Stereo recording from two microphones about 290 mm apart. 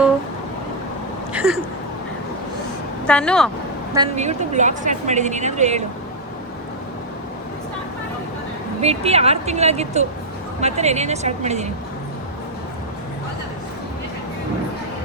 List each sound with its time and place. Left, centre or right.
1.3 s a sound: centre
3.1 s speech: centre
3.9 s speech: centre
8.8 s speech: right